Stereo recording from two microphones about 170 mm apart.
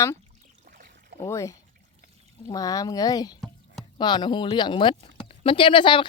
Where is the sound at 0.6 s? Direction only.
55° right (ahead or behind).